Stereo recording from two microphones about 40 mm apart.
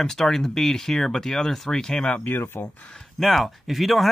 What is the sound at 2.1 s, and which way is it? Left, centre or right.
Speech, left.